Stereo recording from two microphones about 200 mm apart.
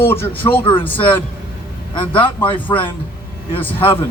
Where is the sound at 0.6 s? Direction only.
25° left (ahead or behind).